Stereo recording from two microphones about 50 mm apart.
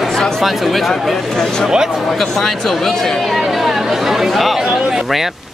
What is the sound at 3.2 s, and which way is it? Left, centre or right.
Speech, centre.